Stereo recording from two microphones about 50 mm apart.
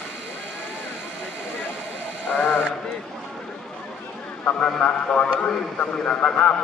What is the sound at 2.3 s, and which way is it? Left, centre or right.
Sheep, left.